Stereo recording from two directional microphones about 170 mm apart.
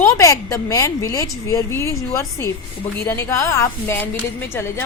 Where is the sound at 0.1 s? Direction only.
20° left (ahead or behind).